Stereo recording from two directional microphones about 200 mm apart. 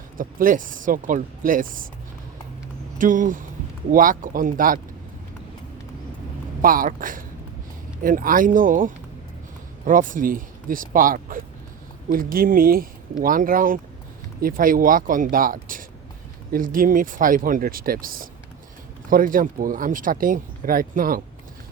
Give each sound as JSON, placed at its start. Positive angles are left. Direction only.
{"t": 0.2, "sound": "speech", "side_deg": -45}
{"t": 3.0, "sound": "speech", "side_deg": -40}
{"t": 6.6, "sound": "speech", "side_deg": -45}